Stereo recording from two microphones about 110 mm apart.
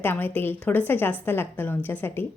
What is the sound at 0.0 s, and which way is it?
A woman's voice, 15° left (ahead or behind).